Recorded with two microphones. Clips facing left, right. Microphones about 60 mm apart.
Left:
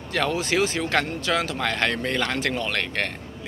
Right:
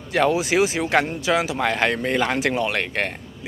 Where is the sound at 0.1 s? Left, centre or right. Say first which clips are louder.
Right 5 dB; centre.